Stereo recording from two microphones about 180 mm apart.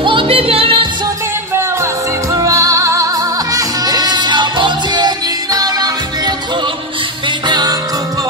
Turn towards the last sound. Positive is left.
turn(degrees=-25)  # may be behind; listen again after turning